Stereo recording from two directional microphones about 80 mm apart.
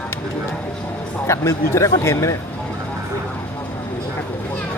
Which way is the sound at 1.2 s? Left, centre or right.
Left.